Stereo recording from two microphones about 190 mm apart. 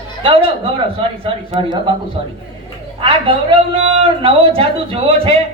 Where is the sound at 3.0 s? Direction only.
30° right (ahead or behind).